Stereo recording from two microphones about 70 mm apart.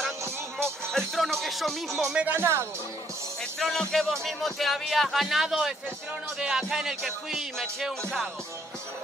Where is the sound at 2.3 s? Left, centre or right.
Right.